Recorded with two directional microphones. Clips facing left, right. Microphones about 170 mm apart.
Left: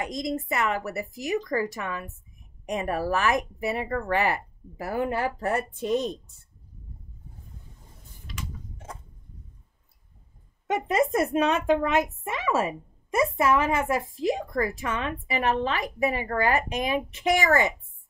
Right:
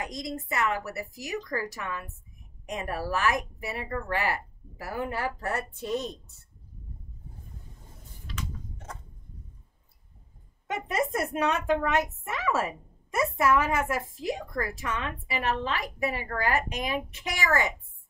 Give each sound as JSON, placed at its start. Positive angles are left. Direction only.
{"t": 0.0, "sound": "a woman's voice", "side_deg": 25}
{"t": 8.3, "sound": "a sound", "side_deg": 10}
{"t": 10.7, "sound": "a woman's voice", "side_deg": 20}